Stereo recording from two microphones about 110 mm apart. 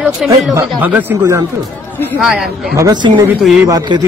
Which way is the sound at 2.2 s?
5° right (ahead or behind).